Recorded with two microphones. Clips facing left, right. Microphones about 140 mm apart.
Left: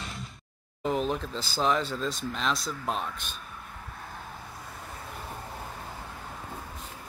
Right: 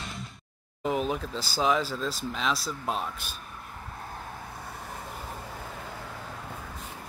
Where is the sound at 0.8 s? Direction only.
5° right (ahead or behind).